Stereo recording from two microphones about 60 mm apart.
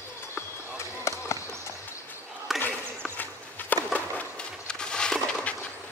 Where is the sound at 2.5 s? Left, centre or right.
Centre.